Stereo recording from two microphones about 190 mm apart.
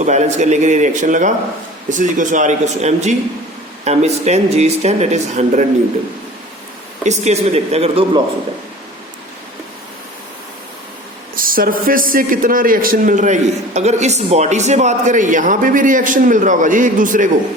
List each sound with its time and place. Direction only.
0.0 s speech: 40° right (ahead or behind)
7.0 s speech: 35° right (ahead or behind)
11.3 s speech: 50° right (ahead or behind)